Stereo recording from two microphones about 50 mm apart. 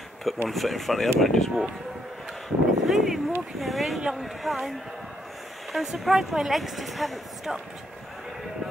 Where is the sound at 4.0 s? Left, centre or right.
Centre.